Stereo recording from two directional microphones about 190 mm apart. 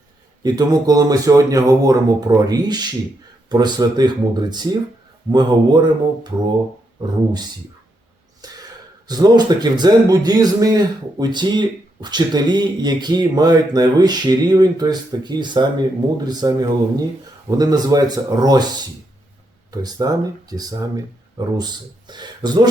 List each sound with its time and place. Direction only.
0.4 s speech: 20° right (ahead or behind)
9.0 s speech: 20° right (ahead or behind)